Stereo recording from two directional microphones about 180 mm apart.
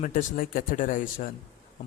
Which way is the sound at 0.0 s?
45° left (ahead or behind).